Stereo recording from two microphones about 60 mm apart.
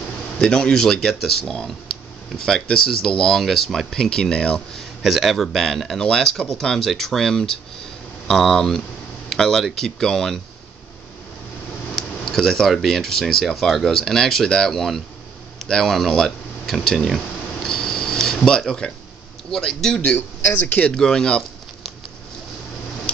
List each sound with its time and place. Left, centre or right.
0.4 s speech: centre
4.7 s speech: centre
11.9 s speech: centre
17.6 s a sound: centre
19.5 s speech: centre
20.0 s speech: left
20.9 s speech: centre
23.1 s a sound: left